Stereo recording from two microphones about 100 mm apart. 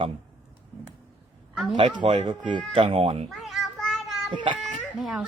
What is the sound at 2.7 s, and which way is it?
Speech, 65° right (ahead or behind).